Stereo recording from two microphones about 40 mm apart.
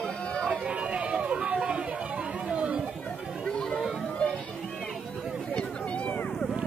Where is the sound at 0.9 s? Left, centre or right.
Right.